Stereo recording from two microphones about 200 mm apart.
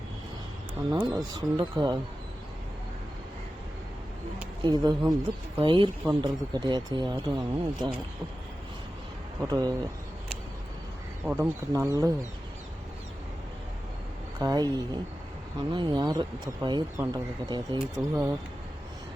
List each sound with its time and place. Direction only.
0.9 s speech: 15° right (ahead or behind)
4.6 s speech: 20° right (ahead or behind)
9.4 s speech: 20° right (ahead or behind)
11.3 s speech: 15° right (ahead or behind)
14.3 s speech: 20° right (ahead or behind)